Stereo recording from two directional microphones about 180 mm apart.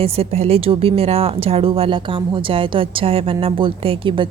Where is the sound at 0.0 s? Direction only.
35° right (ahead or behind).